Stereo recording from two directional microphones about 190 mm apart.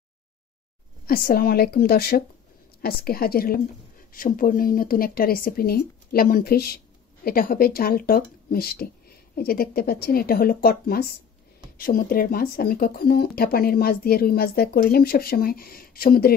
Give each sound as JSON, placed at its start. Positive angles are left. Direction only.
{"t": 1.0, "sound": "speech", "side_deg": 50}